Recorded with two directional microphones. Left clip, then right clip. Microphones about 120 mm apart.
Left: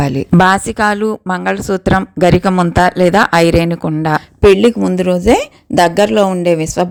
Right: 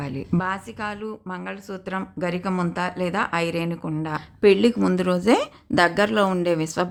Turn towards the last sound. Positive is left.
turn(degrees=35)  # may be behind; listen again after turning